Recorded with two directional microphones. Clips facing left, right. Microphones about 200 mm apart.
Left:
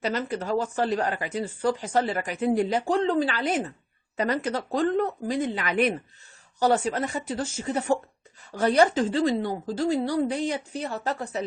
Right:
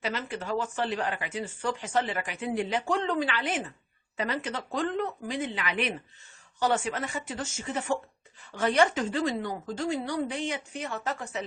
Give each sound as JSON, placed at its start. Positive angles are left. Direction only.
{"t": 0.0, "sound": "speech", "side_deg": 40}